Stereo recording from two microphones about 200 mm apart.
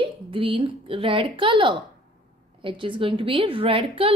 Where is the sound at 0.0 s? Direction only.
25° right (ahead or behind).